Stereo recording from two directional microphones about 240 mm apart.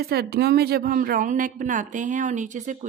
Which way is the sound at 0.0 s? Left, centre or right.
Right.